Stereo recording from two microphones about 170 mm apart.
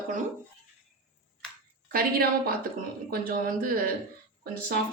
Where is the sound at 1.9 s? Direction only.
60° right (ahead or behind).